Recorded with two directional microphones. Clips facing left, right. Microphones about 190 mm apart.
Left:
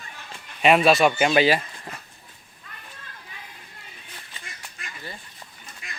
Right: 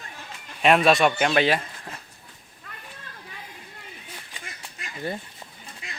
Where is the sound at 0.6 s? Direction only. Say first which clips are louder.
Left 1 dB; centre (ahead or behind).